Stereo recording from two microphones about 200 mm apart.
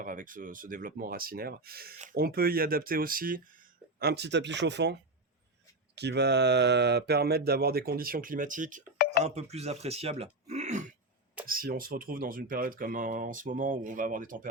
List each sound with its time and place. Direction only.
0.0 s speech: 45° right (ahead or behind)
4.0 s speech: 55° right (ahead or behind)
6.0 s speech: 55° right (ahead or behind)